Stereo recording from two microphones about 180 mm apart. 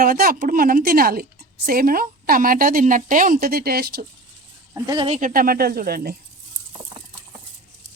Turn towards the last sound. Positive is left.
turn(degrees=-35)  # may be behind; listen again after turning